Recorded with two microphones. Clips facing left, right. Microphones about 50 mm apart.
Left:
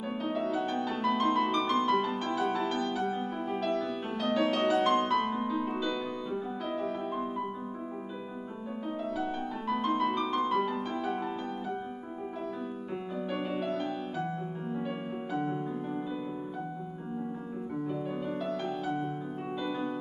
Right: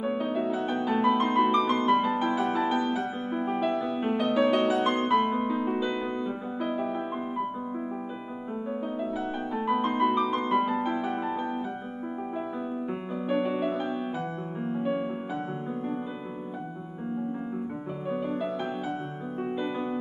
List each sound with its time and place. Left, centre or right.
0.0 s music: centre
9.1 s music: centre
13.3 s music: centre